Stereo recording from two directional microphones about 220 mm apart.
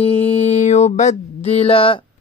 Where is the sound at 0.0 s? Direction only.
30° left (ahead or behind).